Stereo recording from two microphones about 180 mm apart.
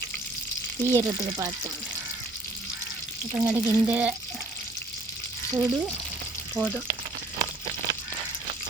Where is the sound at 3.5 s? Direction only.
5° right (ahead or behind).